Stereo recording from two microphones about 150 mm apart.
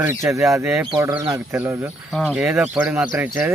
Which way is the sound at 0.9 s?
20° right (ahead or behind).